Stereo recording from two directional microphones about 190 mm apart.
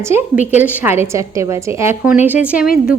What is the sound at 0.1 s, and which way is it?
A woman's voice, 10° right (ahead or behind).